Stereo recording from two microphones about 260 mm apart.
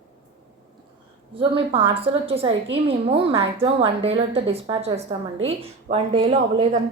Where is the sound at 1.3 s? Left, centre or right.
Right.